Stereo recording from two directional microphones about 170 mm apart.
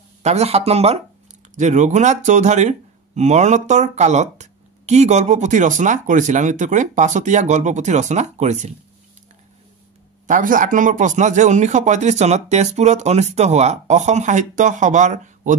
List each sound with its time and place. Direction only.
0.2 s speech: 40° right (ahead or behind)
10.2 s speech: 50° right (ahead or behind)